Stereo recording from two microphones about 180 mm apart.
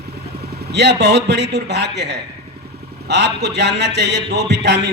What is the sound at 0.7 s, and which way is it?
A man's voice, 70° right (ahead or behind).